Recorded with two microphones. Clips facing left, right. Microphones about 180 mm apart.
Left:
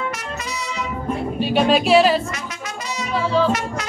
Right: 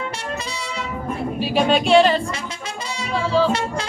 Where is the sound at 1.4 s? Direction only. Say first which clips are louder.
Left 1 dB; centre (ahead or behind).